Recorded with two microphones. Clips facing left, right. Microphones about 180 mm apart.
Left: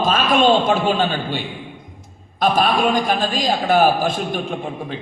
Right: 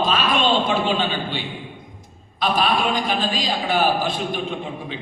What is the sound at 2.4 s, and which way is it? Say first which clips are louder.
Speech: left 4 dB; 45° left (ahead or behind).